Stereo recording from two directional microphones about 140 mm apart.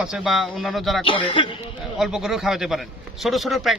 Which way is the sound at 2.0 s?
5° right (ahead or behind).